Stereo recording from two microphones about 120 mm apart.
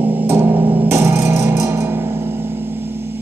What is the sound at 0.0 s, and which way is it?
Music, 15° right (ahead or behind).